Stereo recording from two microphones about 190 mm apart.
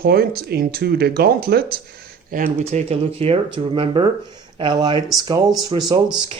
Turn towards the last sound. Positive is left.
turn(degrees=-20)  # may be behind; listen again after turning